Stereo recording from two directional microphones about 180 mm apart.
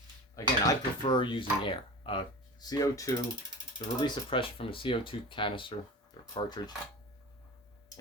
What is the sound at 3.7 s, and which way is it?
Speech, 30° left (ahead or behind).